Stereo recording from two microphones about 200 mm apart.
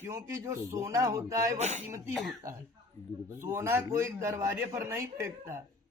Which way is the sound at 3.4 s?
10° right (ahead or behind).